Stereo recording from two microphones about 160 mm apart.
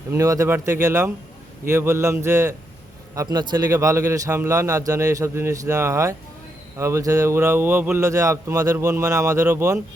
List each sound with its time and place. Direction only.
0.1 s speech: 20° right (ahead or behind)